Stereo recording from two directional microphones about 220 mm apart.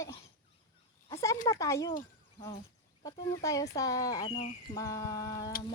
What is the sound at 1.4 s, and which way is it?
Speech, 15° left (ahead or behind).